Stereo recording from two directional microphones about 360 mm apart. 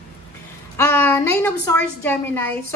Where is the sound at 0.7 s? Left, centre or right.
Centre.